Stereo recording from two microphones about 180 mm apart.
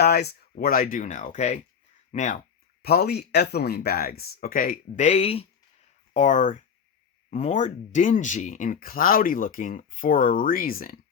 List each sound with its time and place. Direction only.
0.0 s speech: 65° left (ahead or behind); by 2.4 s 40° left (ahead or behind)
2.8 s speech: 60° left (ahead or behind); by 5.5 s 35° left (ahead or behind)
6.1 s speech: 45° left (ahead or behind)